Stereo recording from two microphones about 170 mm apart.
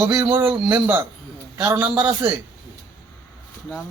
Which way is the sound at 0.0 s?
15° right (ahead or behind).